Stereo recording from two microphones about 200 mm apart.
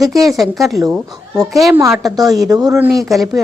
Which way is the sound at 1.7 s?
15° right (ahead or behind).